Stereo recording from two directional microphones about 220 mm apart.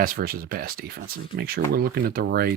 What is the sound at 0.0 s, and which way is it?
Speech, 45° right (ahead or behind).